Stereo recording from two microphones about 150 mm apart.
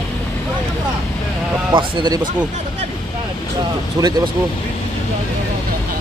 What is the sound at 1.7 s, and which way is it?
Speech, 30° right (ahead or behind).